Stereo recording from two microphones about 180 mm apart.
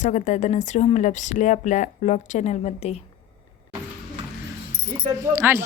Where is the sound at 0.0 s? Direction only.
45° left (ahead or behind).